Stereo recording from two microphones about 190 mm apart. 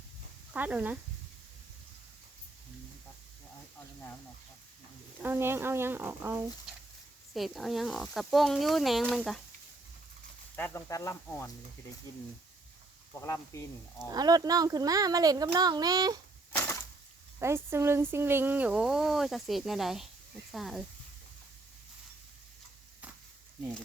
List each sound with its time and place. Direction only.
0.5 s speech: 10° right (ahead or behind)
5.2 s speech: 10° right (ahead or behind)
7.3 s speech: centre (ahead or behind)
10.5 s speech: 15° left (ahead or behind)
14.1 s speech: 20° right (ahead or behind)
16.5 s a sound: 10° left (ahead or behind)
17.4 s speech: 15° right (ahead or behind)